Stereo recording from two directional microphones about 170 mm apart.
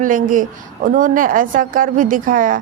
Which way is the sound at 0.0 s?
50° right (ahead or behind).